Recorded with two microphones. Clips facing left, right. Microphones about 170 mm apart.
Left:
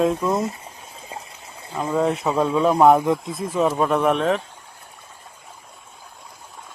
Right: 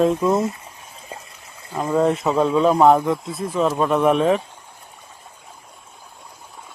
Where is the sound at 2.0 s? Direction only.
Centre (ahead or behind).